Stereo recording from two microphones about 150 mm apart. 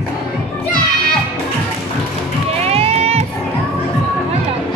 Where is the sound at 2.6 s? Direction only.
40° right (ahead or behind).